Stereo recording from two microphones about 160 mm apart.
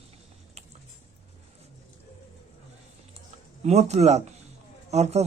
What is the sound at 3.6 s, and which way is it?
A man's voice, 45° right (ahead or behind).